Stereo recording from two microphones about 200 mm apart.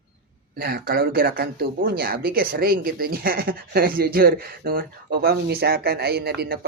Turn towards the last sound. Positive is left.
turn(degrees=-50)  # may be behind; listen again after turning